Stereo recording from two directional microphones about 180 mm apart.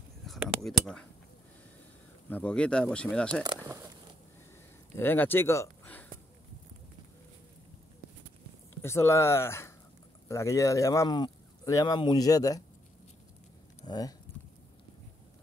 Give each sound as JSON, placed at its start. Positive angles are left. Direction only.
{"t": 0.3, "sound": "a sound", "side_deg": 0}
{"t": 2.2, "sound": "speech", "side_deg": 10}
{"t": 3.4, "sound": "speech", "side_deg": -20}
{"t": 4.9, "sound": "speech", "side_deg": 10}
{"t": 8.8, "sound": "speech", "side_deg": 15}
{"t": 13.8, "sound": "speech", "side_deg": 20}